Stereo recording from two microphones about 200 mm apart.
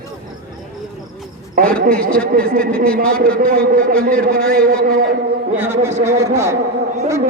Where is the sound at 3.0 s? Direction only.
45° right (ahead or behind).